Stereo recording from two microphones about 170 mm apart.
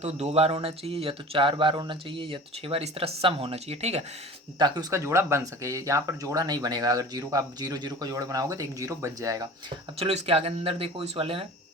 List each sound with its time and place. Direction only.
0.0 s speech: 40° right (ahead or behind)
4.5 s speech: 25° right (ahead or behind)
10.0 s speech: 35° right (ahead or behind)